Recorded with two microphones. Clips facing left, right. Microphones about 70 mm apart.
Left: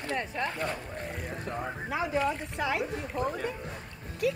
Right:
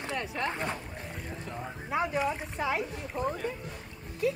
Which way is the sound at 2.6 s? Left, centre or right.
Left.